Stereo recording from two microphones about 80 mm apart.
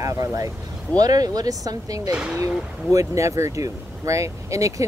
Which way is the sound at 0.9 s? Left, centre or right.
Right.